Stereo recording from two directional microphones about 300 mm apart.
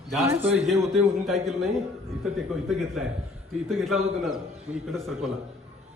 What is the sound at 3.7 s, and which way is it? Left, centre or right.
A man's voice, centre.